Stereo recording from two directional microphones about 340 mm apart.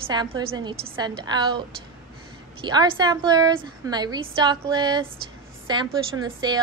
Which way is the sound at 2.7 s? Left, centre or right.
Centre.